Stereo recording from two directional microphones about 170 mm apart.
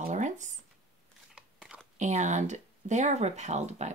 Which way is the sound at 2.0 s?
45° right (ahead or behind).